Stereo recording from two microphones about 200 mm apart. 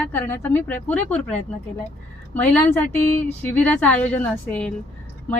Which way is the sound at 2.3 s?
10° left (ahead or behind).